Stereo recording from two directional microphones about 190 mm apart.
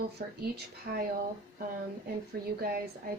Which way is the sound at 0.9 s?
55° right (ahead or behind).